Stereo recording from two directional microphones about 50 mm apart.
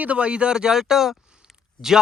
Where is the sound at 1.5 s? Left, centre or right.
Centre.